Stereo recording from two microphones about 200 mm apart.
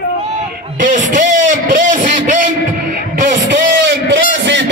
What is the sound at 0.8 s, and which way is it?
A man's voice, 40° right (ahead or behind).